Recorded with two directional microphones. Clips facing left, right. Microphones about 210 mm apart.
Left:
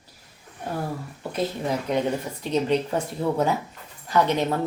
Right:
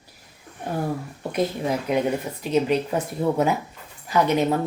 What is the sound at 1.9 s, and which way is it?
Speech, 5° right (ahead or behind).